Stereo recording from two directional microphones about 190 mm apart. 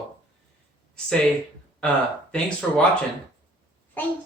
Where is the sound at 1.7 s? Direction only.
5° left (ahead or behind).